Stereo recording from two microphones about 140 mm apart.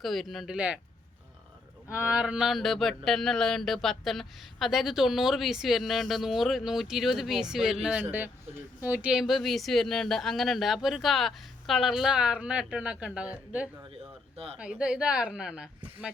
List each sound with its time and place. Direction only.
0.0 s speech: centre (ahead or behind)
1.9 s a woman's voice: 10° right (ahead or behind)